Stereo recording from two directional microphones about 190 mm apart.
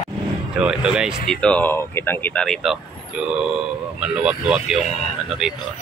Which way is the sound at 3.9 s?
5° right (ahead or behind).